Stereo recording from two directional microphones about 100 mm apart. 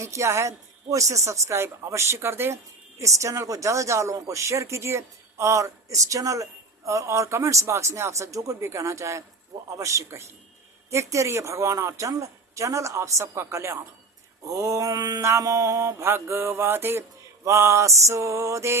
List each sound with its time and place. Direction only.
0.0 s speech: 30° right (ahead or behind)